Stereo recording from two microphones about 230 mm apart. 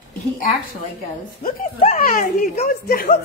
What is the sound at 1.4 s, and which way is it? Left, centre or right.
Speech, left.